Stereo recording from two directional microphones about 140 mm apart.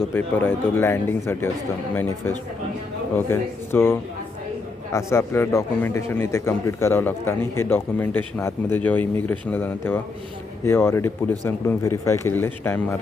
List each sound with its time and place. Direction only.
0.1 s speech: 15° left (ahead or behind)